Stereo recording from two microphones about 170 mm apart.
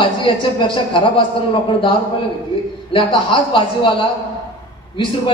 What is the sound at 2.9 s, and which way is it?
A man's voice, 30° left (ahead or behind).